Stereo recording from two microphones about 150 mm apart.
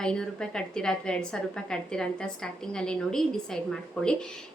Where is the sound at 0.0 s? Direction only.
5° left (ahead or behind).